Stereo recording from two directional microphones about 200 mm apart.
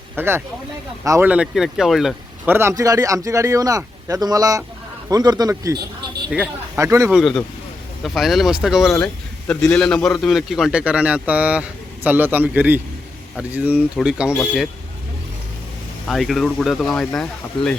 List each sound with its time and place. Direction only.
0.2 s a man's voice: 10° right (ahead or behind)
2.6 s a man's voice: 15° right (ahead or behind)
6.7 s a man's voice: 15° right (ahead or behind)
7.2 s a man's voice: centre (ahead or behind)
16.0 s a man's voice: centre (ahead or behind)